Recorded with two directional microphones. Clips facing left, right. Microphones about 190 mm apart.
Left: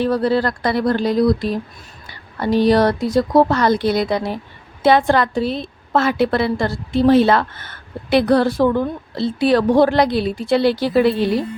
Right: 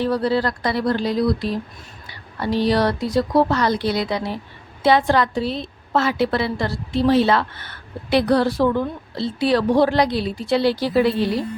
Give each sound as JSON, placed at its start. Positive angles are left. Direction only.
{"t": 0.0, "sound": "a woman's voice", "side_deg": 50}